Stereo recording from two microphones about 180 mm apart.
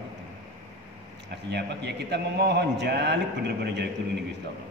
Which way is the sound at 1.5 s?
70° right (ahead or behind).